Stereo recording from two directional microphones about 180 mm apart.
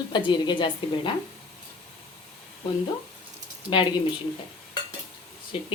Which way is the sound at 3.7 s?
25° left (ahead or behind).